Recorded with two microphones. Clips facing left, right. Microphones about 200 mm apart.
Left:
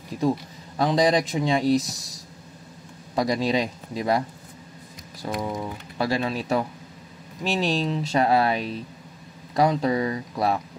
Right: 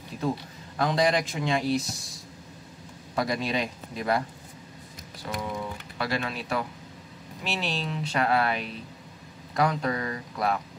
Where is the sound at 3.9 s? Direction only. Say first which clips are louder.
Left 4 dB; 20° left (ahead or behind).